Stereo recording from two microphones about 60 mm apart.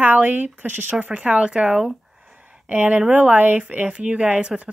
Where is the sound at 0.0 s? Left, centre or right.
Right.